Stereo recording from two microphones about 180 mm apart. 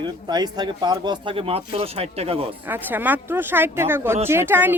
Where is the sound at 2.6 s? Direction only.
10° right (ahead or behind).